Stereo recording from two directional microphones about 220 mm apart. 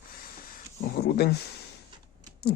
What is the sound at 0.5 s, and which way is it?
Speech, 45° left (ahead or behind).